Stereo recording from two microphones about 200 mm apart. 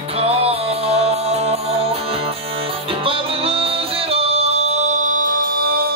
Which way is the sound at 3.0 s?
30° right (ahead or behind).